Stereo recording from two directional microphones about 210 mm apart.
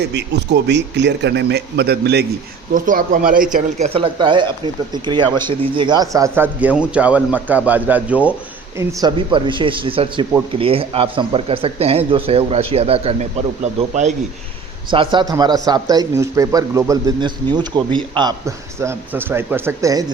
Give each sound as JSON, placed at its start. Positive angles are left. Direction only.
{"t": 0.0, "sound": "speech", "side_deg": -55}
{"t": 2.7, "sound": "speech", "side_deg": -40}
{"t": 3.5, "sound": "speech", "side_deg": -30}